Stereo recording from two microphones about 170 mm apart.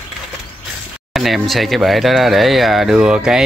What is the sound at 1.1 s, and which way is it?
Speech, centre (ahead or behind).